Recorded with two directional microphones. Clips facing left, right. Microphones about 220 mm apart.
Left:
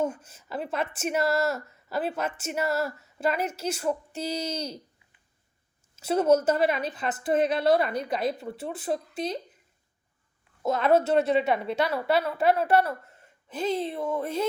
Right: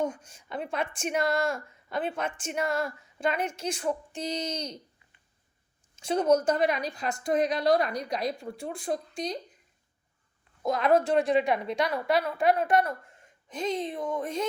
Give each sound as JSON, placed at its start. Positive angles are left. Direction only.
{"t": 0.0, "sound": "a woman's voice", "side_deg": 5}
{"t": 6.0, "sound": "a woman's voice", "side_deg": 5}
{"t": 10.6, "sound": "a woman's voice", "side_deg": 5}
{"t": 12.0, "sound": "a woman's voice", "side_deg": 30}
{"t": 13.6, "sound": "speech", "side_deg": 5}